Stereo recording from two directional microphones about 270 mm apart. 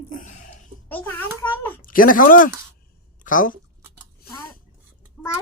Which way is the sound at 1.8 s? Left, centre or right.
Left.